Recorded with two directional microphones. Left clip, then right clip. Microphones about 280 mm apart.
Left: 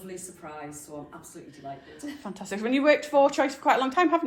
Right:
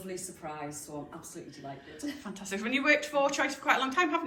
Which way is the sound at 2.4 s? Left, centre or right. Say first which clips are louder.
Left 6 dB; centre.